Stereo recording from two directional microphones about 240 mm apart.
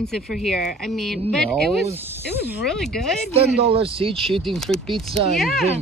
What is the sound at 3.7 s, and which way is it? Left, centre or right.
Speech, right.